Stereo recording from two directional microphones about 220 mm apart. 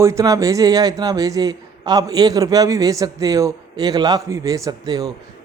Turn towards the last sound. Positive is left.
turn(degrees=-15)  # may be behind; listen again after turning